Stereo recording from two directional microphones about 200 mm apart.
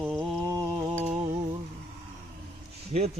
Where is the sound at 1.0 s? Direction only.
35° right (ahead or behind).